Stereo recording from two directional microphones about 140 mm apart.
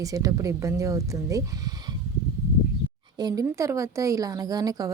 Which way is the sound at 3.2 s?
25° right (ahead or behind).